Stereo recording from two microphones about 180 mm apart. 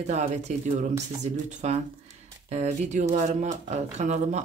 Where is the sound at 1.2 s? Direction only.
40° right (ahead or behind).